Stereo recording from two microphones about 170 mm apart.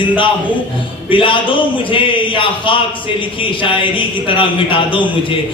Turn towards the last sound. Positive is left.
turn(degrees=30)  # may be behind; listen again after turning